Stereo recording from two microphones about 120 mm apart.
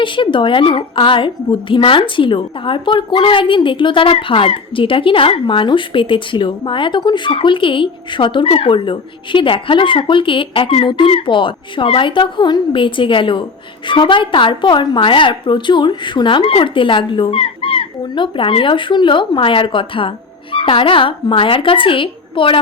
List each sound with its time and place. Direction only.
0.0 s a woman's voice: 45° left (ahead or behind)